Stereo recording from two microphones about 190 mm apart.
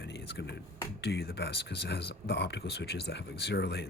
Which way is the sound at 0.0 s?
65° left (ahead or behind).